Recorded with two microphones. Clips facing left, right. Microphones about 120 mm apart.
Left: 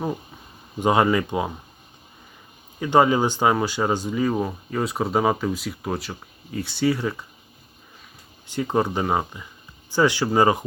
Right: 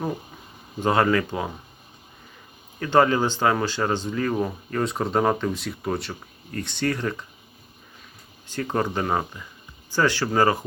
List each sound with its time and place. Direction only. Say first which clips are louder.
0.8 s speech: left 1 dB; 15° left (ahead or behind)
2.7 s speech: left 1 dB; 15° left (ahead or behind)
8.4 s speech: left 3 dB; 15° left (ahead or behind)